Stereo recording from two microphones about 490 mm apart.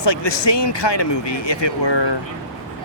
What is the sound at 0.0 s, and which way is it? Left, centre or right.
Speech, left.